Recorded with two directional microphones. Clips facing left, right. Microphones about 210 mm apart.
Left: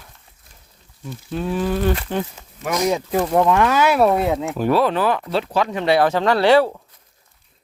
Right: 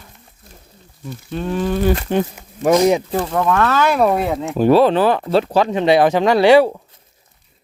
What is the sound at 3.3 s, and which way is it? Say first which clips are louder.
Speech: left 1 dB; 20° left (ahead or behind).